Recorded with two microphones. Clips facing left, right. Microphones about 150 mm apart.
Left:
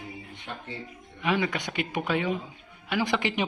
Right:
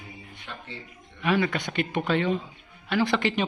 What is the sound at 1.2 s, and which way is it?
Speech, 15° left (ahead or behind).